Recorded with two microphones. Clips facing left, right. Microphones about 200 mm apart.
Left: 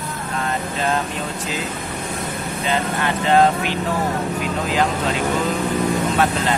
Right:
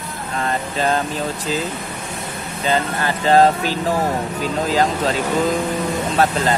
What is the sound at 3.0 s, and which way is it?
Speech, 35° right (ahead or behind).